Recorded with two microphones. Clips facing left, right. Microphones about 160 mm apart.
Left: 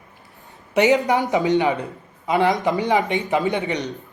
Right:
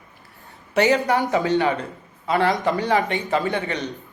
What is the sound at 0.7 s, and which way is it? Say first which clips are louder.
A man's voice: left 2 dB; 20° left (ahead or behind).